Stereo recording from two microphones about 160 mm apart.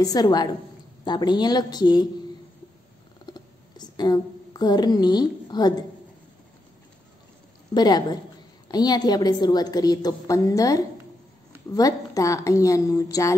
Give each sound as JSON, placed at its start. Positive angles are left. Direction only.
{"t": 0.0, "sound": "a woman's voice", "side_deg": 25}
{"t": 3.3, "sound": "a sound", "side_deg": 25}
{"t": 7.7, "sound": "a woman's voice", "side_deg": 25}